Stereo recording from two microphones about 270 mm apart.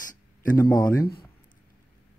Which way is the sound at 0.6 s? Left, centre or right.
Centre.